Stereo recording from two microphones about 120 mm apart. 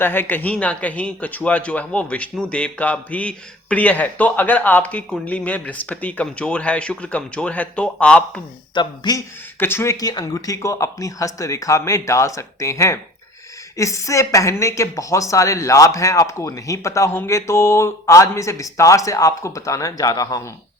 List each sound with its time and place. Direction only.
0.0 s a man's voice: 15° left (ahead or behind)
8.7 s a man's voice: 40° left (ahead or behind)
9.1 s speech: 20° left (ahead or behind)